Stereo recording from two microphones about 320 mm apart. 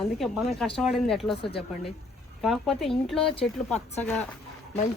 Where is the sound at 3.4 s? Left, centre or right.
Left.